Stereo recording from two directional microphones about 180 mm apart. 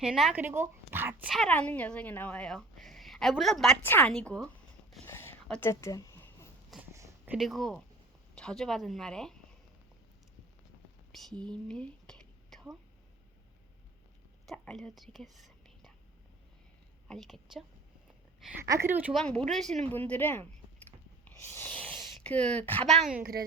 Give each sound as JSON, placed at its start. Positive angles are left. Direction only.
{"t": 0.0, "sound": "speech", "side_deg": -5}
{"t": 1.3, "sound": "speech", "side_deg": 5}
{"t": 5.0, "sound": "a sound", "side_deg": 15}
{"t": 6.9, "sound": "a sound", "side_deg": -15}
{"t": 7.3, "sound": "speech", "side_deg": 0}
{"t": 11.1, "sound": "whispering", "side_deg": 0}
{"t": 14.4, "sound": "speech", "side_deg": 5}
{"t": 17.1, "sound": "speech", "side_deg": 0}
{"t": 18.7, "sound": "speech", "side_deg": -15}
{"t": 19.1, "sound": "speech", "side_deg": 5}
{"t": 21.2, "sound": "a sound", "side_deg": 15}
{"t": 22.9, "sound": "speech", "side_deg": 0}
{"t": 23.1, "sound": "a woman's voice", "side_deg": -55}